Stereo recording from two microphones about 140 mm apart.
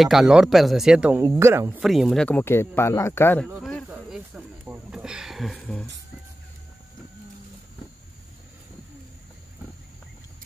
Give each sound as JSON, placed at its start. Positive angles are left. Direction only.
{"t": 0.0, "sound": "speech", "side_deg": -5}
{"t": 1.3, "sound": "speech", "side_deg": -20}
{"t": 1.8, "sound": "speech", "side_deg": 0}
{"t": 2.2, "sound": "speech", "side_deg": 15}
{"t": 3.9, "sound": "a sound", "side_deg": -10}